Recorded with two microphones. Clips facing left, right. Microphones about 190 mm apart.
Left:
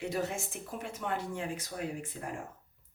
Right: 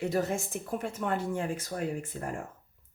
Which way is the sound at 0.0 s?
45° right (ahead or behind).